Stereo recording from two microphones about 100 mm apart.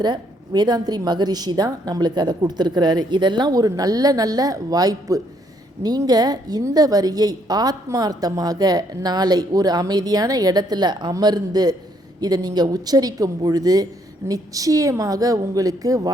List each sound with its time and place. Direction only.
0.0 s a woman's voice: 45° right (ahead or behind)